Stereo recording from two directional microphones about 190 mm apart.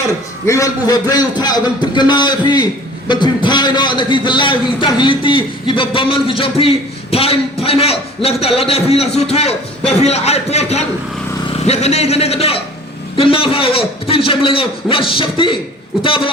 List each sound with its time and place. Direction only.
0.4 s a man's voice: 15° left (ahead or behind)